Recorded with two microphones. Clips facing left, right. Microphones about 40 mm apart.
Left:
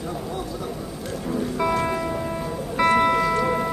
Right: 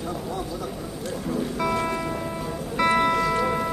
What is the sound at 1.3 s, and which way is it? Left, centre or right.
Music, centre.